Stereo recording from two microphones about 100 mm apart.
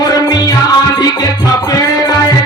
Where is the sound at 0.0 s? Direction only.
40° left (ahead or behind).